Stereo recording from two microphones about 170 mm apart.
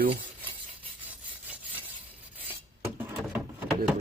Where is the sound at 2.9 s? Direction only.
10° right (ahead or behind).